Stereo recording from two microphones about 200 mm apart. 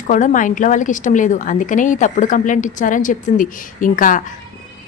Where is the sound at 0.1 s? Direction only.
40° left (ahead or behind).